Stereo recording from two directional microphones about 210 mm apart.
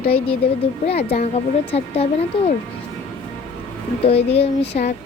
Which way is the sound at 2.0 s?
30° left (ahead or behind).